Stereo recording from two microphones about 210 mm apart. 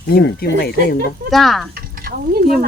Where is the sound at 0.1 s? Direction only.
50° left (ahead or behind).